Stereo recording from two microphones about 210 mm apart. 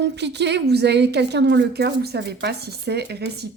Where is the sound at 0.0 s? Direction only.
55° right (ahead or behind).